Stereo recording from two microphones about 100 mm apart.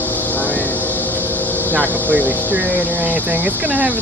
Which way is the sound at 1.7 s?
15° right (ahead or behind).